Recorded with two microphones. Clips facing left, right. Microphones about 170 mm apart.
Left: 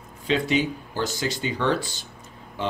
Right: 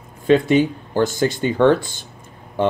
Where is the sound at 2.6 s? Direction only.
55° right (ahead or behind).